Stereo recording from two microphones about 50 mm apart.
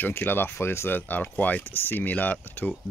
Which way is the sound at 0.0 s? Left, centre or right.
Left.